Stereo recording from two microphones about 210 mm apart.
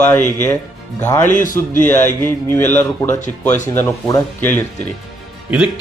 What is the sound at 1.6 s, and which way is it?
A man's voice, 10° left (ahead or behind).